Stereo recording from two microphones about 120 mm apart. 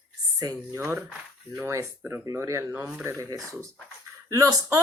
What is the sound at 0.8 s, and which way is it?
Speech, 20° right (ahead or behind).